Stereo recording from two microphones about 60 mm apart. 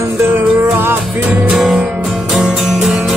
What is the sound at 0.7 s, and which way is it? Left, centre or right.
Music, right.